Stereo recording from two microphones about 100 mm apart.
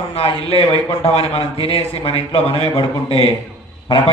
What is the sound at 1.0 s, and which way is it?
A man's voice, 85° left.